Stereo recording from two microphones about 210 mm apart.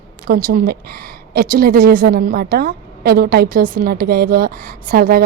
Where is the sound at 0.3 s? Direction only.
40° right (ahead or behind).